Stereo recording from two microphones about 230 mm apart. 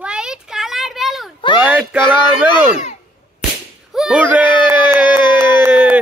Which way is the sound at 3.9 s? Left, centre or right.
Centre.